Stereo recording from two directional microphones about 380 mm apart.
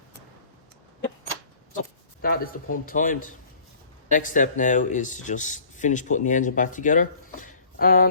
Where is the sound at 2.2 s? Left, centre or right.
Left.